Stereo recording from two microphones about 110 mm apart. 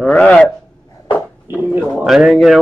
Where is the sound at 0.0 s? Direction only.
10° left (ahead or behind).